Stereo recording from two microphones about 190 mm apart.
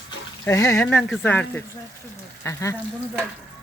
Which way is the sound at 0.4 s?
15° left (ahead or behind).